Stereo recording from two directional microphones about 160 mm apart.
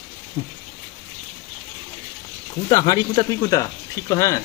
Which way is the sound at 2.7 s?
25° left (ahead or behind).